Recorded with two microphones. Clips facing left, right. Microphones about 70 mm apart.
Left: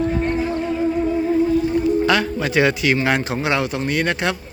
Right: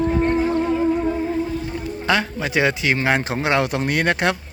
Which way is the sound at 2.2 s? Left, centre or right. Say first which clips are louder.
Left 2 dB; centre.